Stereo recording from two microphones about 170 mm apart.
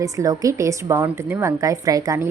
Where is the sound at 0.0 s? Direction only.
20° right (ahead or behind).